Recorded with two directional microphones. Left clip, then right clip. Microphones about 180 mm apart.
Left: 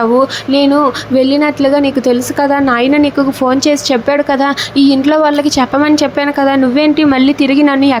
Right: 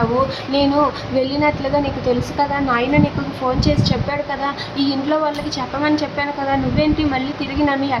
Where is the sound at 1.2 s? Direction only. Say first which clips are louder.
Left 7 dB; 35° left (ahead or behind).